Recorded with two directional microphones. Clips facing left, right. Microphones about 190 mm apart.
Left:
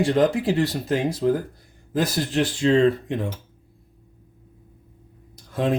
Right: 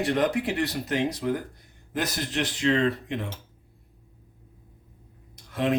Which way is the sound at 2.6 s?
30° left (ahead or behind).